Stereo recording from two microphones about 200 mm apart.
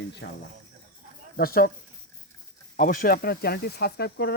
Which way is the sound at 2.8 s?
45° left (ahead or behind).